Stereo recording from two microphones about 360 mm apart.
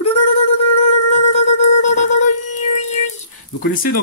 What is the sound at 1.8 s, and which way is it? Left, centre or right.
Music, centre.